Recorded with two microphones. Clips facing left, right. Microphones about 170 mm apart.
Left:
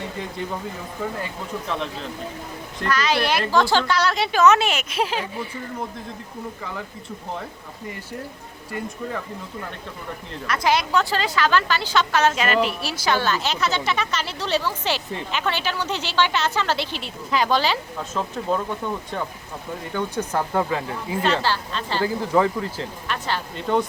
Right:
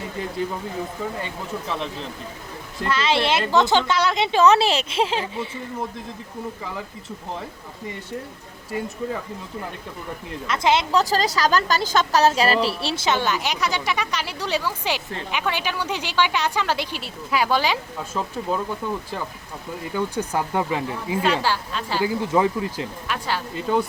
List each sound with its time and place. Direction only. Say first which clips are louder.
1.6 s speech: left 1 dB; centre (ahead or behind)
2.9 s a woman's voice: right 1 dB; 25° right (ahead or behind)
10.4 s a woman's voice: right 1 dB; 25° right (ahead or behind)
11.0 s a woman's voice: right 2 dB; 40° right (ahead or behind); by 23.8 s 5° right (ahead or behind)